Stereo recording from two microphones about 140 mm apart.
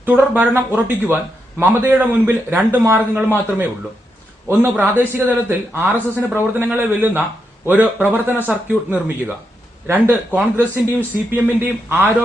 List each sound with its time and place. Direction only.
0.0 s a man's voice: 15° right (ahead or behind)
4.4 s a man's voice: 15° right (ahead or behind)